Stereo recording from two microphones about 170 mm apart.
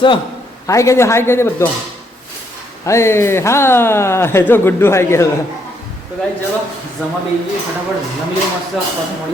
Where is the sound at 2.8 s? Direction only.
15° left (ahead or behind).